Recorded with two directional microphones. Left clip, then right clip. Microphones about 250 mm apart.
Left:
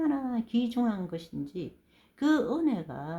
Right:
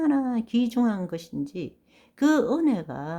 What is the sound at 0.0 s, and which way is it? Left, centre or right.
A woman's voice, right.